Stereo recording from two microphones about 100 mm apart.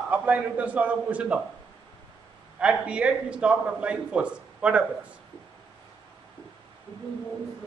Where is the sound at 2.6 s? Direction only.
10° right (ahead or behind).